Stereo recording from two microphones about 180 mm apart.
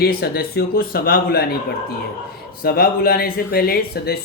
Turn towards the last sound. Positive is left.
turn(degrees=60)  # may be behind; listen again after turning